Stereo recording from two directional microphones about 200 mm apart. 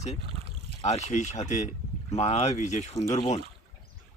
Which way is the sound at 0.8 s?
35° left (ahead or behind).